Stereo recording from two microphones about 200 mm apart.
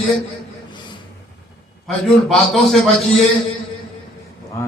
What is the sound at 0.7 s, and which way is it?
Vehicle, 25° left (ahead or behind).